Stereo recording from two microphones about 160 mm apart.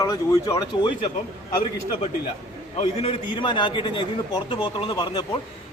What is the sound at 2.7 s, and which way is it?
A man's voice, 40° left (ahead or behind).